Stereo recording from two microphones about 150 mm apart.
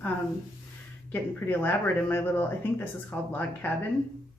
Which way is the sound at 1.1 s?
10° left (ahead or behind).